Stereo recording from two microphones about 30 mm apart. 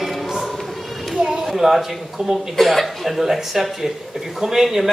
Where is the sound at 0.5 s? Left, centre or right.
Centre.